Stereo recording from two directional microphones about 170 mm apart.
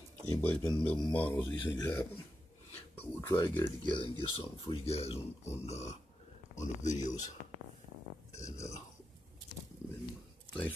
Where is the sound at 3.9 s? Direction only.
30° left (ahead or behind); by 7.2 s 45° left (ahead or behind).